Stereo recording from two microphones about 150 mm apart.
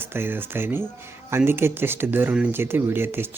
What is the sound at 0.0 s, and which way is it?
Speech, 15° right (ahead or behind).